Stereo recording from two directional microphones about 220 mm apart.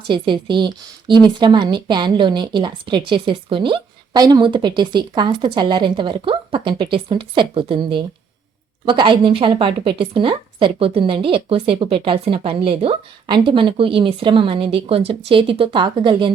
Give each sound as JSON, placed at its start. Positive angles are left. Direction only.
{"t": 0.1, "sound": "a woman's voice", "side_deg": -20}